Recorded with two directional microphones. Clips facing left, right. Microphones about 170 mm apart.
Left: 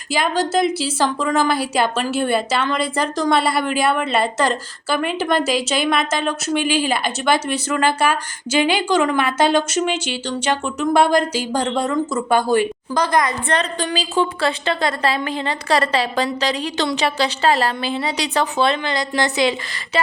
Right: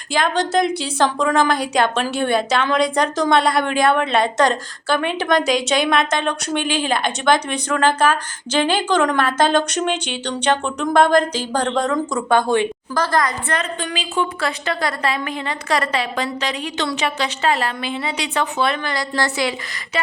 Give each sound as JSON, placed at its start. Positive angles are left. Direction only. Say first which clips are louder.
{"t": 0.1, "sound": "a woman's voice", "louder": "even", "side_deg": 5}
{"t": 12.9, "sound": "a woman's voice", "louder": "left 1 dB", "side_deg": 20}